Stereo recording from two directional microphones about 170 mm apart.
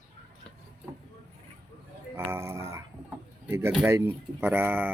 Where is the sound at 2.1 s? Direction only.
15° right (ahead or behind).